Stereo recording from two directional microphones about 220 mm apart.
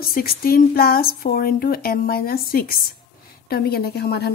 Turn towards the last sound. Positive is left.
turn(degrees=45)  # may be behind; listen again after turning